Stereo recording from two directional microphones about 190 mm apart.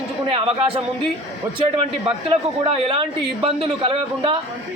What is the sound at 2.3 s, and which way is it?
Speech, 30° right (ahead or behind).